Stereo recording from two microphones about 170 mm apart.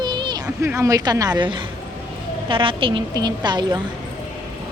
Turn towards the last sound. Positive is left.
turn(degrees=-25)  # may be behind; listen again after turning